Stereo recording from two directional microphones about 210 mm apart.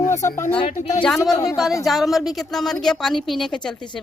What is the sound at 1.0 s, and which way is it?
A man's voice, centre (ahead or behind).